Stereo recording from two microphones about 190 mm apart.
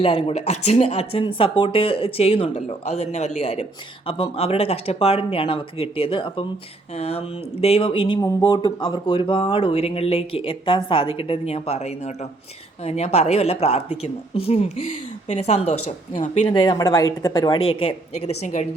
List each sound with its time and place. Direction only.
0.0 s speech: 30° left (ahead or behind)
16.5 s speech: 25° left (ahead or behind)
17.7 s speech: 30° left (ahead or behind)